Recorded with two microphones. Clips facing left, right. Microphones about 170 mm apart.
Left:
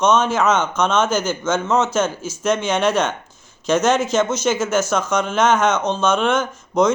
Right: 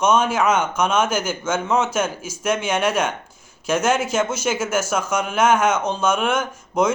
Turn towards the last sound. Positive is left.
turn(degrees=-10)  # may be behind; listen again after turning